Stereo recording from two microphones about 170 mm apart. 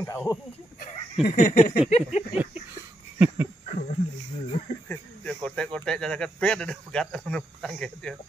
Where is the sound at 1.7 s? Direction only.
40° left (ahead or behind).